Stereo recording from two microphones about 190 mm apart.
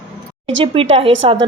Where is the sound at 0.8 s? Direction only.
30° right (ahead or behind).